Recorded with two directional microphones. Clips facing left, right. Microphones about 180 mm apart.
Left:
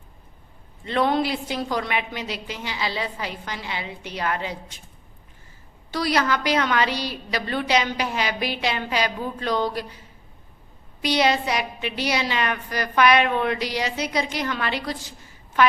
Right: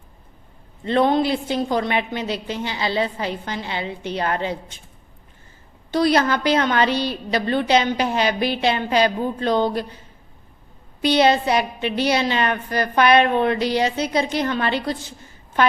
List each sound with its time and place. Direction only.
0.9 s a woman's voice: 25° right (ahead or behind)
5.9 s a woman's voice: 25° right (ahead or behind)
11.0 s a woman's voice: 25° right (ahead or behind)